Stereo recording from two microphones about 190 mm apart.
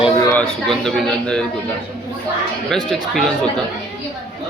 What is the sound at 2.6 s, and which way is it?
Speech, centre (ahead or behind).